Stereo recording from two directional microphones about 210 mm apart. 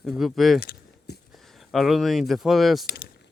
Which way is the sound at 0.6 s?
50° left (ahead or behind).